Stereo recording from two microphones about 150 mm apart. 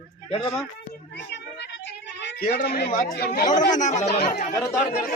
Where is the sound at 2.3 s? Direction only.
85° left.